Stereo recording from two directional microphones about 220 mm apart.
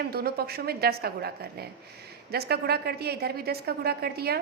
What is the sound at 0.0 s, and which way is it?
A woman's voice, 45° right (ahead or behind).